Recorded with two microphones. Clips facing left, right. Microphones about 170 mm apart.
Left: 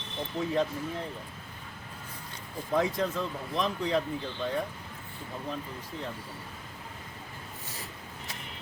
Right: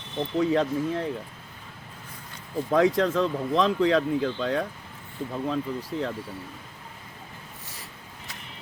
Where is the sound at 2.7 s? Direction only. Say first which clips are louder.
Right 7 dB; 90° right.